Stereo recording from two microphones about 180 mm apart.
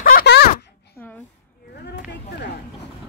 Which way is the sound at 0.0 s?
55° left (ahead or behind).